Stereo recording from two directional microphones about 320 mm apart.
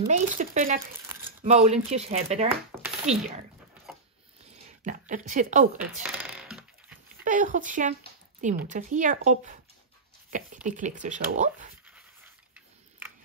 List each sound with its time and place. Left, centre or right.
0.1 s speech: right
3.9 s a sound: centre
4.8 s speech: right
6.0 s typing: centre
7.2 s speech: right
11.8 s dog: centre